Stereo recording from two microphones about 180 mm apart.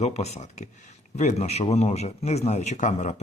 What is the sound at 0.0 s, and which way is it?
Speech, 35° left (ahead or behind).